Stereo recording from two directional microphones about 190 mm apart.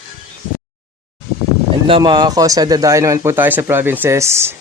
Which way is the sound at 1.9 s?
25° right (ahead or behind).